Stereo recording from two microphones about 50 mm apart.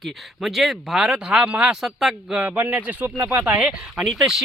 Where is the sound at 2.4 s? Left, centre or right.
Right.